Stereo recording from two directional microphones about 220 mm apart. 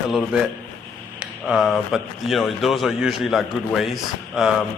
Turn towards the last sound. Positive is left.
turn(degrees=0)  # may be behind; listen again after turning